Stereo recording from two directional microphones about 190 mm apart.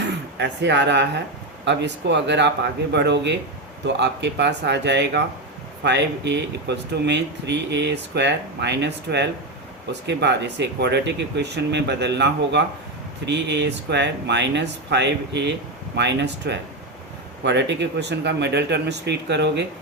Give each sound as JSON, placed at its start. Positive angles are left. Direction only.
{"t": 0.0, "sound": "speech", "side_deg": -65}